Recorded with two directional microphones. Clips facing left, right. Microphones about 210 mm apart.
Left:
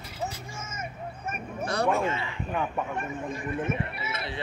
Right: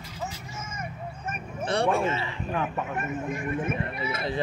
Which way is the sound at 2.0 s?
30° right (ahead or behind).